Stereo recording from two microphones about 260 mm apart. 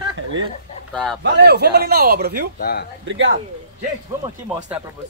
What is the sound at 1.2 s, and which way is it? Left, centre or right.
Speech, right.